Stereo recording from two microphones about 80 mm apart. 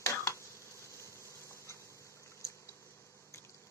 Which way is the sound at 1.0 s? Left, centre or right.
Left.